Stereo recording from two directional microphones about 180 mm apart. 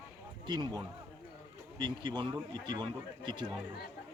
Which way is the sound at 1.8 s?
25° right (ahead or behind).